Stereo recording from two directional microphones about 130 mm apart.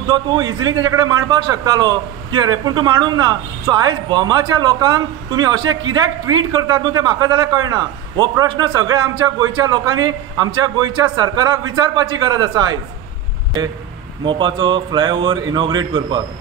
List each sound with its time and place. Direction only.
0.1 s a man's voice: 35° right (ahead or behind)
14.2 s a man's voice: 35° right (ahead or behind)